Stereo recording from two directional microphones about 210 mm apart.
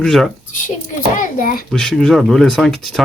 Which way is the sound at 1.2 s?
40° left (ahead or behind).